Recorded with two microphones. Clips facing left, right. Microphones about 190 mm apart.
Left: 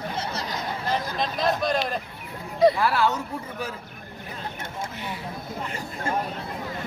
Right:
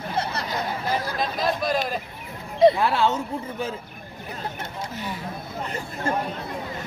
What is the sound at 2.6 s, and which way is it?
Speech, 25° right (ahead or behind).